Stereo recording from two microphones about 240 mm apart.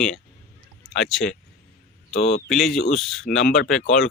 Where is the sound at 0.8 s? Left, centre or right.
Centre.